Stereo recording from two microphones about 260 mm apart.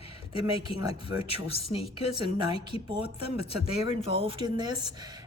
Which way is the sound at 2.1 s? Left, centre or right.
Centre.